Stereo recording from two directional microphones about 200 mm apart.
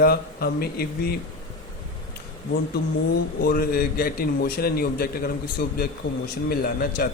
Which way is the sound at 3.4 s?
45° left (ahead or behind).